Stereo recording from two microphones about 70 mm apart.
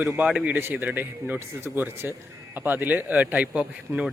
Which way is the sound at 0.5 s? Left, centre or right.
Right.